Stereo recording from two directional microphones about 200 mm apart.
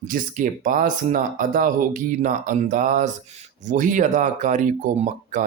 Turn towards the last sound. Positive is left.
turn(degrees=-40)  # may be behind; listen again after turning